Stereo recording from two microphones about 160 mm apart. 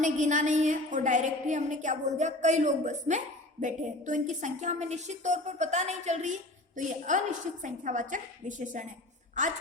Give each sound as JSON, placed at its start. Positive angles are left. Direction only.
{"t": 0.0, "sound": "a woman's voice", "side_deg": -50}